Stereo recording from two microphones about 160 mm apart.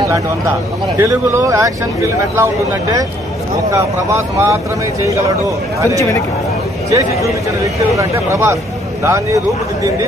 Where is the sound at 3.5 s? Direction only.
20° right (ahead or behind).